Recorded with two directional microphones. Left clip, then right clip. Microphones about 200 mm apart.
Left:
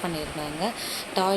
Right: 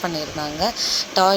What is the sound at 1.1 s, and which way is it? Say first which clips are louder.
Speech: right 7 dB; 20° right (ahead or behind).